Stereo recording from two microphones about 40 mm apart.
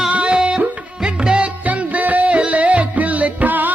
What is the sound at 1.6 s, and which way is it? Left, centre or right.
Music, right.